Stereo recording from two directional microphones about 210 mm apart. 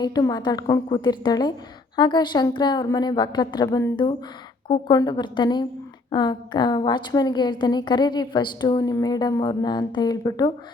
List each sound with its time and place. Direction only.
0.0 s a woman's voice: 20° left (ahead or behind)